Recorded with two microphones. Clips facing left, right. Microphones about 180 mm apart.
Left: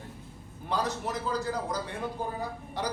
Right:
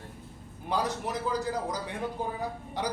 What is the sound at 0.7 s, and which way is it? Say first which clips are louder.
A woman's voice: right 1 dB; 15° right (ahead or behind).